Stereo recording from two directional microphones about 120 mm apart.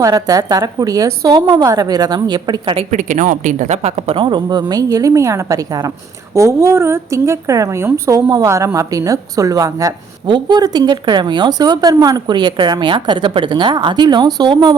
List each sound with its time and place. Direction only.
0.0 s a woman's voice: 30° right (ahead or behind)
2.9 s speech: 90° right; by 4.2 s 65° right (ahead or behind)
4.2 s a woman's voice: 40° right (ahead or behind)